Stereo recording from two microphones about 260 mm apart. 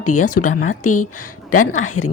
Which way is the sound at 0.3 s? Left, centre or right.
Left.